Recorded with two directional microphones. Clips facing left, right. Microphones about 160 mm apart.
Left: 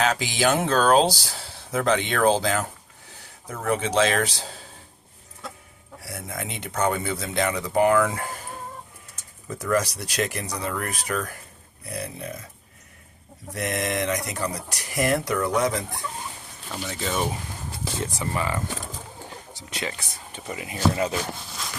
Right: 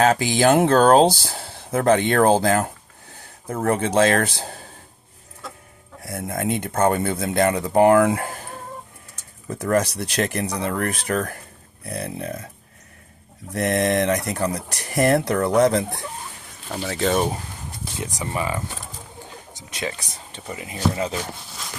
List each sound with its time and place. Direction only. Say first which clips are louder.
0.0 s speech: right 6 dB; 50° right (ahead or behind)
6.0 s speech: right 7 dB; 50° right (ahead or behind)
9.6 s speech: right 3 dB; 55° right (ahead or behind)
13.5 s speech: right 7 dB; 55° right (ahead or behind)
16.8 s speech: right 8 dB; 75° right (ahead or behind)
18.0 s speech: right 2 dB; 15° right (ahead or behind)
20.3 s speech: even; 30° right (ahead or behind)